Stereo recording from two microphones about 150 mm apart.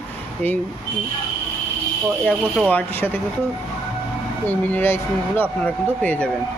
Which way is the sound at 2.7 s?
15° left (ahead or behind).